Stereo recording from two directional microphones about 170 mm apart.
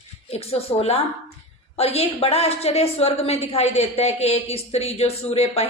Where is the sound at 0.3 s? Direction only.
35° left (ahead or behind).